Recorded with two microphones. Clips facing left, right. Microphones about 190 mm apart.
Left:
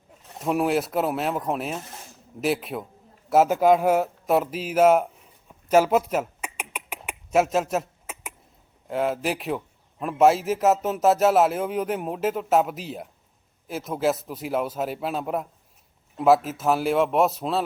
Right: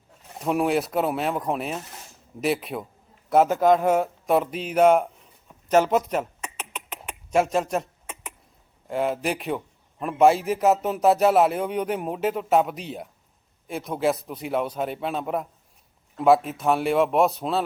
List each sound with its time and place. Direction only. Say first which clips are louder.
0.4 s speech: even; centre (ahead or behind)
5.6 s a sound: left 1 dB; 5° left (ahead or behind)
8.9 s speech: even; centre (ahead or behind)